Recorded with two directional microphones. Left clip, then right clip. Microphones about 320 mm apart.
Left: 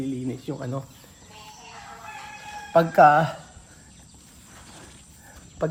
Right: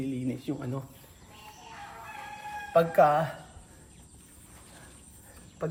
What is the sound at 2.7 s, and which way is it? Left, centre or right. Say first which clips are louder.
Speech: left 6 dB; left.